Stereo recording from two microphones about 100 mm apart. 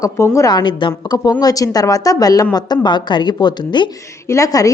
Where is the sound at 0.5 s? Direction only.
50° left (ahead or behind).